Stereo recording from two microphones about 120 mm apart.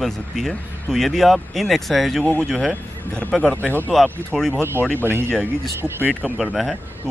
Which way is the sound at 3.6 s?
20° right (ahead or behind).